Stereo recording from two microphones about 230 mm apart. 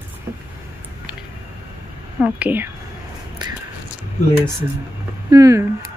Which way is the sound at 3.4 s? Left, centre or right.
Centre.